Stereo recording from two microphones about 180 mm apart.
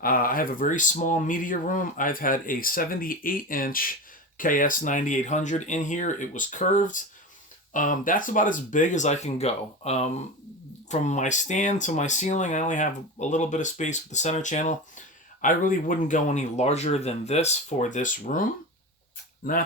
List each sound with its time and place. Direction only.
0.0 s speech: 50° left (ahead or behind)